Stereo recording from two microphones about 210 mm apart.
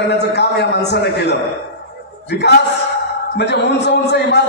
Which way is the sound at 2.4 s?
55° left (ahead or behind).